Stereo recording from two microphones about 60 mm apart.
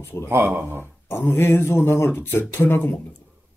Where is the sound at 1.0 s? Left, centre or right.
Left.